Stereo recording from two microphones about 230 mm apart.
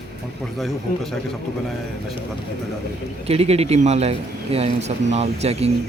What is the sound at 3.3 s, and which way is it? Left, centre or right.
Speech, right.